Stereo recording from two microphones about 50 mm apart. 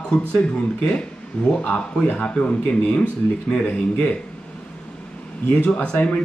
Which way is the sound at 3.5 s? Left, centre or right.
Left.